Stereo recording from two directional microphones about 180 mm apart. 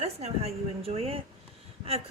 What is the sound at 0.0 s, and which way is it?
Speech, 35° right (ahead or behind).